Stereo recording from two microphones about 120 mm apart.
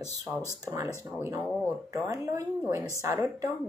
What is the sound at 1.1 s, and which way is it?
A woman's voice, 20° right (ahead or behind).